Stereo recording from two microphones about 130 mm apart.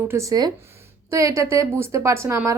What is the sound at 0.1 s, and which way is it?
A woman's voice, 25° right (ahead or behind).